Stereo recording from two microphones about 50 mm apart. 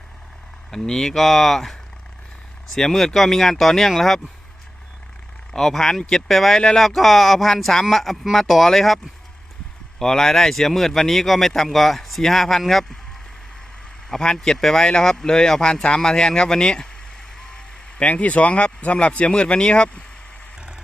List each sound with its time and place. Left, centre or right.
0.8 s speech: centre
2.7 s speech: centre
5.5 s speech: centre
10.0 s speech: centre
14.1 s speech: centre